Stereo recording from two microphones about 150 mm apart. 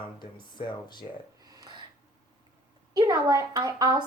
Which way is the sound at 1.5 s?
30° right (ahead or behind).